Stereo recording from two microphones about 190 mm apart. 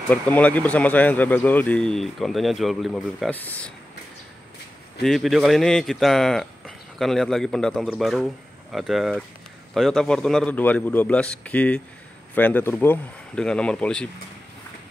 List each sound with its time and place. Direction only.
0.1 s speech: 10° left (ahead or behind)
5.0 s speech: centre (ahead or behind)